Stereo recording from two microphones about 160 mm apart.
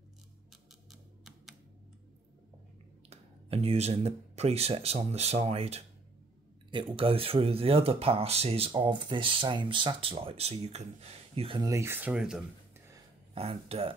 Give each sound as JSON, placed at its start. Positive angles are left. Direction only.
{"t": 0.5, "sound": "a sound", "side_deg": 0}
{"t": 3.1, "sound": "speech", "side_deg": -40}
{"t": 11.6, "sound": "speech", "side_deg": -15}
{"t": 13.3, "sound": "speech", "side_deg": -35}